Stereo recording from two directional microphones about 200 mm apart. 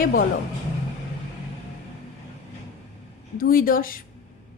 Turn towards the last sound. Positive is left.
turn(degrees=45)  # may be behind; listen again after turning